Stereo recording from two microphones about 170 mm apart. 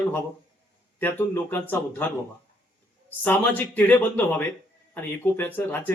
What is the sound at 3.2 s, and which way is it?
Speech, 10° left (ahead or behind).